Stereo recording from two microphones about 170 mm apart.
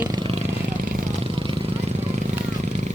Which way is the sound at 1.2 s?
30° right (ahead or behind).